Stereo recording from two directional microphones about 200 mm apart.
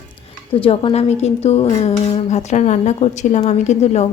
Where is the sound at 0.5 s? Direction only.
25° left (ahead or behind).